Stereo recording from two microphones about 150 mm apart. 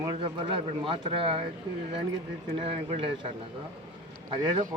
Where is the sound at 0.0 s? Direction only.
30° right (ahead or behind).